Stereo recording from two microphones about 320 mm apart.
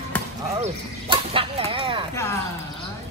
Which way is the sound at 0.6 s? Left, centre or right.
Centre.